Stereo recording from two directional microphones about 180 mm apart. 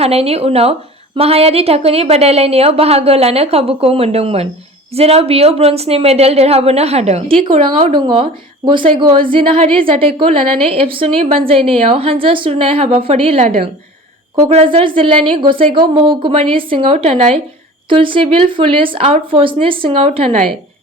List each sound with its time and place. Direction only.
0.0 s a woman's voice: 35° right (ahead or behind)